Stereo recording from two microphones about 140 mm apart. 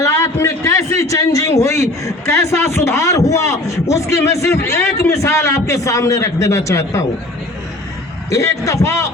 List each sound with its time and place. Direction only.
0.0 s a man's voice: 20° left (ahead or behind)
8.3 s a man's voice: 20° left (ahead or behind)